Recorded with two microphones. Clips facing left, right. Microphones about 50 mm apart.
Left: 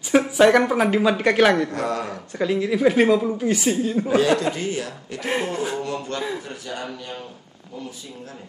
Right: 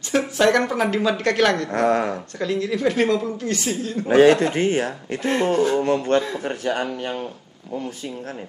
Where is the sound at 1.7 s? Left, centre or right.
Right.